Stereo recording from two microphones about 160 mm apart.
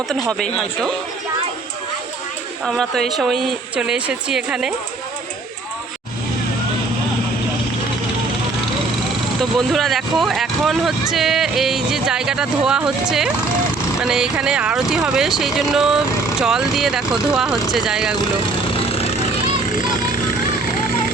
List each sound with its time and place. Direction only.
0.1 s speech: centre (ahead or behind)
2.6 s speech: centre (ahead or behind)
9.4 s speech: centre (ahead or behind)
18.7 s a sound: 35° left (ahead or behind)